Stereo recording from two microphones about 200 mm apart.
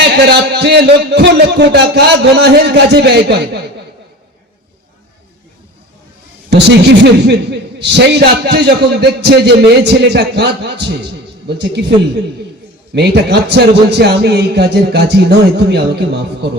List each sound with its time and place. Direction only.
0.2 s a man's voice: 55° right (ahead or behind)
6.5 s a man's voice: 55° right (ahead or behind)